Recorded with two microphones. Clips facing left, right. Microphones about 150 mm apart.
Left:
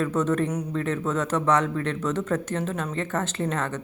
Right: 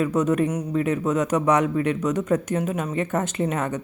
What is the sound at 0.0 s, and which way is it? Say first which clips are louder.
Speech: right 3 dB; 15° right (ahead or behind).